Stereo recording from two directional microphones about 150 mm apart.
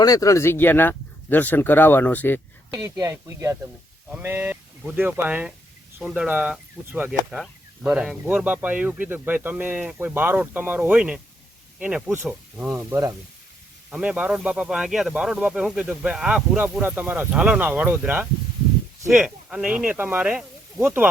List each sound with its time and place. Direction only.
0.0 s speech: 25° left (ahead or behind)
2.7 s speech: 20° right (ahead or behind)
13.9 s speech: 5° right (ahead or behind)